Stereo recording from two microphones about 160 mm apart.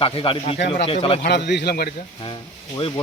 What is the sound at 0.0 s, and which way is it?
Speech, 35° left (ahead or behind).